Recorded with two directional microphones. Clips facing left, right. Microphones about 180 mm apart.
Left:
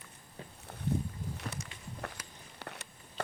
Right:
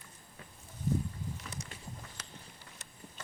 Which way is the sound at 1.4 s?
65° left (ahead or behind).